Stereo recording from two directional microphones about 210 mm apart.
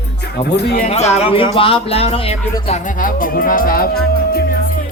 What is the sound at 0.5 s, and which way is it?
Speech, 50° left (ahead or behind).